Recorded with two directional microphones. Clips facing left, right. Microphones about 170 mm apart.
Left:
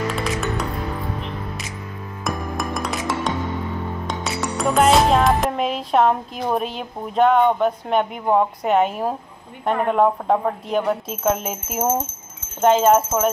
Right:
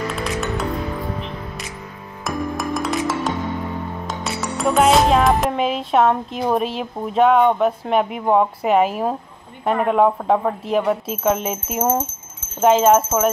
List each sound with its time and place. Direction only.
0.2 s music: centre (ahead or behind)
2.2 s music: centre (ahead or behind)
4.1 s speech: centre (ahead or behind)